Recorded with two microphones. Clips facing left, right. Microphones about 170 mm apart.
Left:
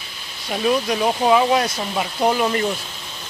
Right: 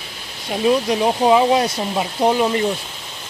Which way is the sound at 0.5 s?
20° right (ahead or behind).